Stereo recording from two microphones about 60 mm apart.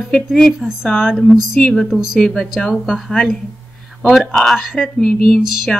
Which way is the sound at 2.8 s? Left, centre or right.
Centre.